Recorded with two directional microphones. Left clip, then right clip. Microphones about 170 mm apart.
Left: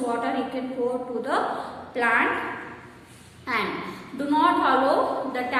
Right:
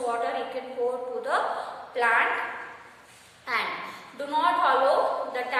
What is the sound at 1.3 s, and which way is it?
Speech, 10° right (ahead or behind).